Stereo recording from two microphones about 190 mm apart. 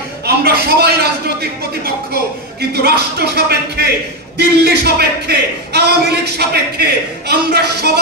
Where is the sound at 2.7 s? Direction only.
60° right (ahead or behind).